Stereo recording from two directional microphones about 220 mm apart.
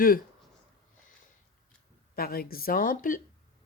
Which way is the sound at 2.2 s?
45° left (ahead or behind).